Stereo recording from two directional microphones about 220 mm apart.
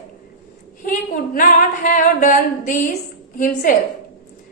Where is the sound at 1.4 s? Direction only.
35° left (ahead or behind).